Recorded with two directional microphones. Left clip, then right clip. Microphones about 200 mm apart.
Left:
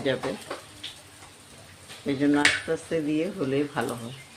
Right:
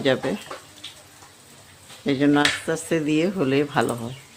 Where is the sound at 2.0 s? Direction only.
50° right (ahead or behind).